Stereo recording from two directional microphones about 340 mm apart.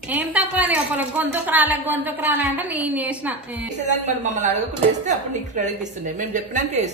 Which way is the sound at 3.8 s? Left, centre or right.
Right.